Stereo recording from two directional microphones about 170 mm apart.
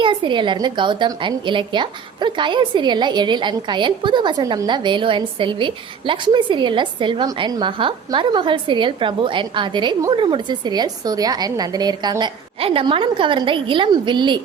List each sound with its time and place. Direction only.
0.0 s a woman's voice: 30° right (ahead or behind)